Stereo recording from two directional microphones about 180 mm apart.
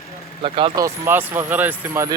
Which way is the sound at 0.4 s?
30° right (ahead or behind).